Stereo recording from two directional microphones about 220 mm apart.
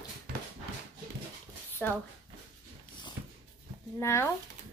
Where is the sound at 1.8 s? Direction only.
10° left (ahead or behind).